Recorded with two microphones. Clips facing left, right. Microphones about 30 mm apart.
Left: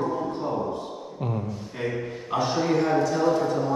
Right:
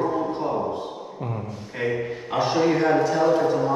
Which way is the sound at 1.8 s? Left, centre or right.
Right.